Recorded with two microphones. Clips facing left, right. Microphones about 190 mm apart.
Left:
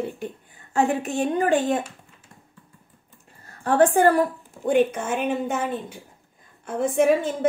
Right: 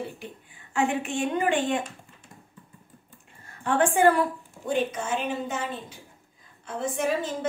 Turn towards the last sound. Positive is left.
turn(degrees=55)  # may be behind; listen again after turning